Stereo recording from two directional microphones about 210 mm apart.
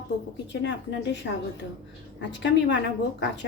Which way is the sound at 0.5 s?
60° left (ahead or behind).